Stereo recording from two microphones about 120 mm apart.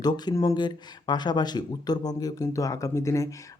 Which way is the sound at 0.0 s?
35° left (ahead or behind).